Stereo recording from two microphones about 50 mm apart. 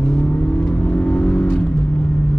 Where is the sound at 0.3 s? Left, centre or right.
Left.